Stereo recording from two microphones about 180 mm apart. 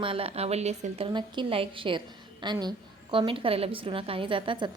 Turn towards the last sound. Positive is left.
turn(degrees=-25)  # may be behind; listen again after turning